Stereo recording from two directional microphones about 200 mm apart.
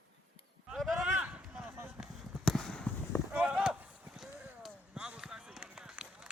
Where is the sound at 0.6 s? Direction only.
Centre (ahead or behind).